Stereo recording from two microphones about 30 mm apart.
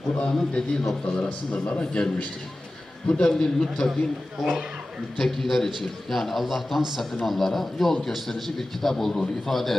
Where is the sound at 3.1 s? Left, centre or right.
Left.